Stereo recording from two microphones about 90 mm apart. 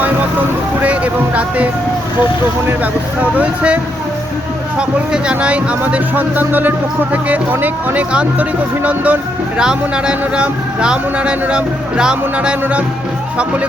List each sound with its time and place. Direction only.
0.8 s music: 15° right (ahead or behind)
2.6 s speech: 15° right (ahead or behind)
4.8 s speech: 10° right (ahead or behind)